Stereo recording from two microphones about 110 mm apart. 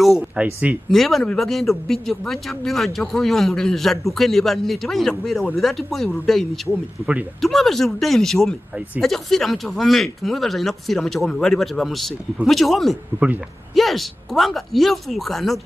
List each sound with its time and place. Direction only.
0.0 s speech: 5° right (ahead or behind)
13.1 s speech: 20° right (ahead or behind)
13.7 s speech: centre (ahead or behind)